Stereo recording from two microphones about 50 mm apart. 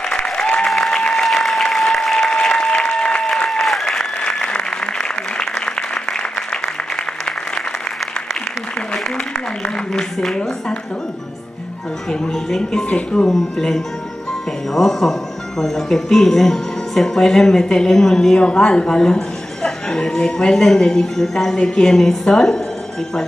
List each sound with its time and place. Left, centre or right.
0.1 s applause: centre
3.4 s applause: centre
3.8 s applause: centre
9.9 s a sound: centre
12.1 s speech: centre